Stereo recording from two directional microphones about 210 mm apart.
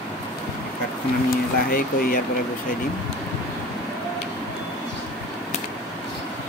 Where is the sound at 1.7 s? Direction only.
45° left (ahead or behind).